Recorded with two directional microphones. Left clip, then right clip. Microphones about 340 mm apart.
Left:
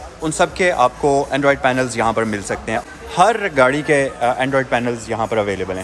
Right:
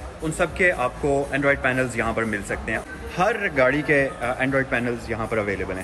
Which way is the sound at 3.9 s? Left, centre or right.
Centre.